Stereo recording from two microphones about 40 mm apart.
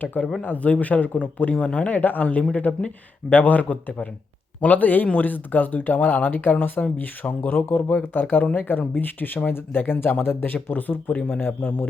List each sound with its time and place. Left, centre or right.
0.0 s a man's voice: left
8.1 s speech: left
9.5 s speech: left
10.2 s speech: left
11.1 s speech: left
11.3 s speech: left